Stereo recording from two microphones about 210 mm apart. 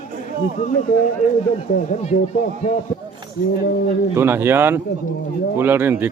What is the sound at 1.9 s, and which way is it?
Speech, 30° left (ahead or behind).